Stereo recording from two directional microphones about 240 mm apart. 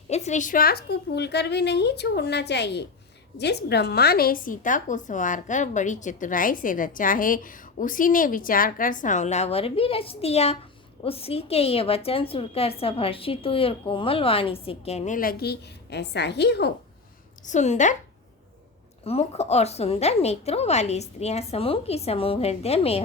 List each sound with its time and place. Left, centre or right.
0.1 s a woman's voice: left
17.4 s a woman's voice: left
19.0 s a woman's voice: left